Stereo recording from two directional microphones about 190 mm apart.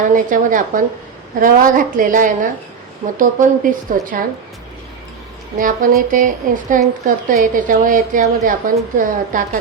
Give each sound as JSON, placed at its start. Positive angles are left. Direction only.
{"t": 0.0, "sound": "a woman's voice", "side_deg": -45}
{"t": 5.5, "sound": "a woman's voice", "side_deg": -45}